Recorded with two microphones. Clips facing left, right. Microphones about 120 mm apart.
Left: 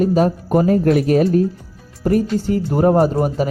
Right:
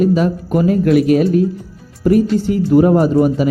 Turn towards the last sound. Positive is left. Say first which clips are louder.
# right 4 dB
turn(degrees=40)  # may be behind; listen again after turning